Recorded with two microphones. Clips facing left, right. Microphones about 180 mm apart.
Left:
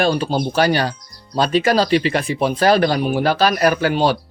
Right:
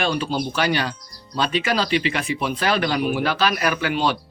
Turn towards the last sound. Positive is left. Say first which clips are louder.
# left 6 dB
turn(degrees=40)  # may be behind; listen again after turning